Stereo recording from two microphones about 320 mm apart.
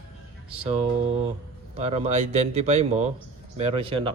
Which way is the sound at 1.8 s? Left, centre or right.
Centre.